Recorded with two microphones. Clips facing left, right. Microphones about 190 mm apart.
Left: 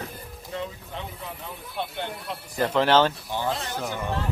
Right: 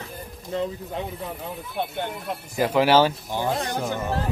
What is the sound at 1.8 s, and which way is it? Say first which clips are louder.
Speech: right 3 dB; 50° right (ahead or behind).